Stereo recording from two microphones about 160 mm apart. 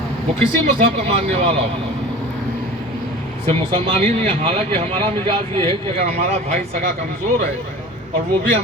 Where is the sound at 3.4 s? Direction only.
40° right (ahead or behind).